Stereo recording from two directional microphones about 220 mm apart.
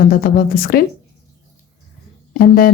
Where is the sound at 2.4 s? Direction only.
40° left (ahead or behind).